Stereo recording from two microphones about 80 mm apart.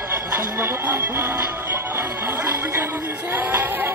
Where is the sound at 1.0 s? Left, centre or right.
Right.